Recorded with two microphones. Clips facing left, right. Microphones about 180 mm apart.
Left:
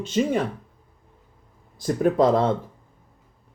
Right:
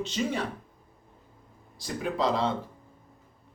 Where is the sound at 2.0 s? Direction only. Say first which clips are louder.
Left 8 dB; 50° left (ahead or behind).